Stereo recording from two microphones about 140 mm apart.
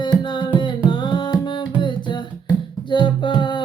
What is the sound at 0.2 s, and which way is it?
Music, 35° left (ahead or behind).